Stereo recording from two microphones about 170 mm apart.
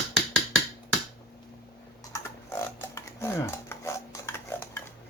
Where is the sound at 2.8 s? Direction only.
15° left (ahead or behind).